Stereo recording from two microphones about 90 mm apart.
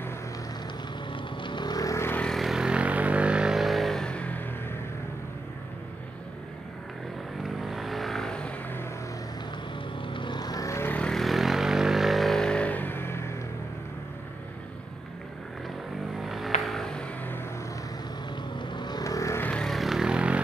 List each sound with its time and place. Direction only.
1.1 s vehicle: 60° left (ahead or behind); by 2.0 s 40° left (ahead or behind)
2.2 s vehicle: centre (ahead or behind); by 4.7 s 20° left (ahead or behind)
7.4 s vehicle: centre (ahead or behind)
9.9 s vehicle: 65° left (ahead or behind); by 10.8 s 40° left (ahead or behind)
10.8 s vehicle: 20° left (ahead or behind)
11.1 s vehicle: centre (ahead or behind); by 13.2 s 25° left (ahead or behind)
16.2 s vehicle: centre (ahead or behind)
18.6 s vehicle: 60° left (ahead or behind)
19.0 s vehicle: 35° left (ahead or behind)
19.4 s vehicle: 10° left (ahead or behind); by 20.3 s 10° right (ahead or behind)